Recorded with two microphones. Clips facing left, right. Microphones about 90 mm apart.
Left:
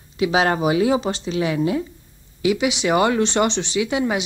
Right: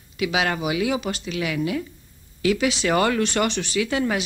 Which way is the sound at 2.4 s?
15° left (ahead or behind).